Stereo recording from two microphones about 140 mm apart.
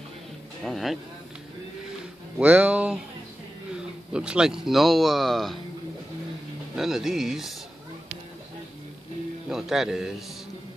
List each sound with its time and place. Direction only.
0.7 s speech: centre (ahead or behind)
2.3 s speech: 10° right (ahead or behind)
6.7 s speech: 5° right (ahead or behind)
9.5 s speech: 5° right (ahead or behind)